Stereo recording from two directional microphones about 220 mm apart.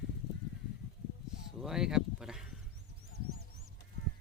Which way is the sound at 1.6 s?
Centre (ahead or behind).